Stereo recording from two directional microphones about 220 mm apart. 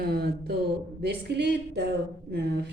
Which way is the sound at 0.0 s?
45° right (ahead or behind).